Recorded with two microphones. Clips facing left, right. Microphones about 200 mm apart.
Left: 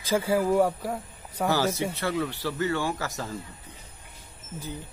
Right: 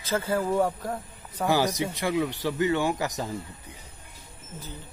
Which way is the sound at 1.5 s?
15° right (ahead or behind).